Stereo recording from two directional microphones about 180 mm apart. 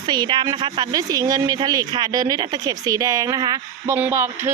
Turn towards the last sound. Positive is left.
turn(degrees=-15)  # may be behind; listen again after turning